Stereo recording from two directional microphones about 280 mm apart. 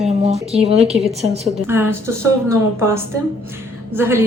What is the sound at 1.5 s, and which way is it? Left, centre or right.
A woman's voice, centre.